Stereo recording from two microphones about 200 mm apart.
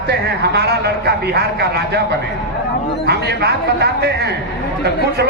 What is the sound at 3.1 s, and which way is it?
A man's voice, 55° right (ahead or behind).